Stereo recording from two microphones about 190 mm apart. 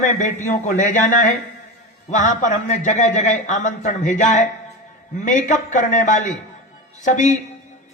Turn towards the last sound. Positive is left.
turn(degrees=40)  # may be behind; listen again after turning